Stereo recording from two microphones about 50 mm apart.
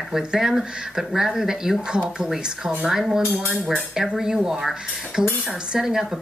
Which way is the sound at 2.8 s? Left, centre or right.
Centre.